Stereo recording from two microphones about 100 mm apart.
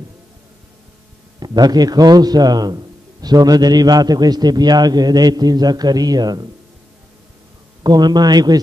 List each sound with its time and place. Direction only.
1.4 s a man's voice: 45° right (ahead or behind)
7.8 s a man's voice: 45° right (ahead or behind)